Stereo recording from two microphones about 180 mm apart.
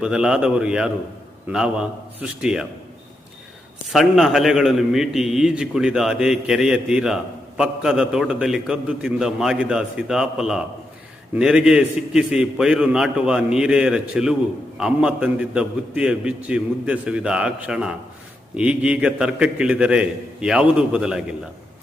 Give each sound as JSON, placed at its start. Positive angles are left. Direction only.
{"t": 0.0, "sound": "a man's voice", "side_deg": -5}
{"t": 3.8, "sound": "a man's voice", "side_deg": 0}